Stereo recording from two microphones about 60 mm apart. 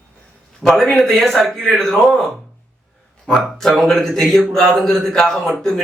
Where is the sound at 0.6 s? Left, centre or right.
Centre.